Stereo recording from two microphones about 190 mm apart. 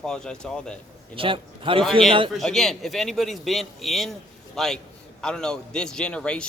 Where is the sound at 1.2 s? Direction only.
25° right (ahead or behind).